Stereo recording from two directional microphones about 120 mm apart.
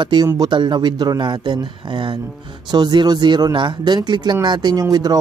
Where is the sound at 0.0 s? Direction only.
35° right (ahead or behind).